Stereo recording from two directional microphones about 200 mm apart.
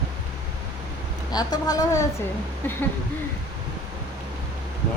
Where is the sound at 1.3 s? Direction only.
20° left (ahead or behind).